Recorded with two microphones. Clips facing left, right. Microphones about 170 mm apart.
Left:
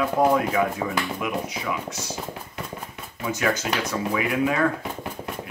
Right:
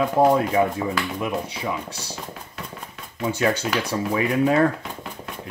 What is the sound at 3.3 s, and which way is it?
Speech, 30° right (ahead or behind).